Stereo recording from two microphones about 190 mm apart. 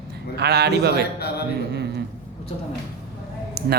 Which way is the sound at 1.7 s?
60° right (ahead or behind).